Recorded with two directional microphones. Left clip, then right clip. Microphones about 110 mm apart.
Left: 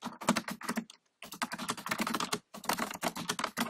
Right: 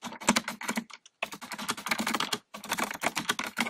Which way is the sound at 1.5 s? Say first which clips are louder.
Right 8 dB; 10° right (ahead or behind).